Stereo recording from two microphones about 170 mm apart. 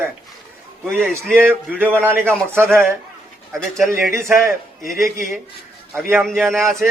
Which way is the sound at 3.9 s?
15° right (ahead or behind).